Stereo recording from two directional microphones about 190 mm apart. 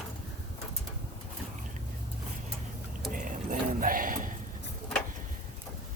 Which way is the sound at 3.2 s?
45° right (ahead or behind).